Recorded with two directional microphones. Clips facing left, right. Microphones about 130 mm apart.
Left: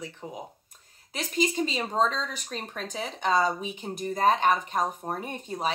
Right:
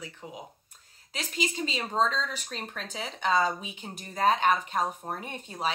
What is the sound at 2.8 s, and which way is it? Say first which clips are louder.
Speech: left 3 dB; 45° left (ahead or behind).